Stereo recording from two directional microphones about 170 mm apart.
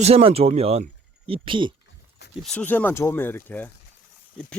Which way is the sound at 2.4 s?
5° left (ahead or behind).